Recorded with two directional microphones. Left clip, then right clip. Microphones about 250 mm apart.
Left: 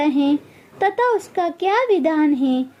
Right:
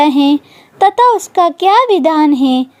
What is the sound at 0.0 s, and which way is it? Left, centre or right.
A woman's voice, right.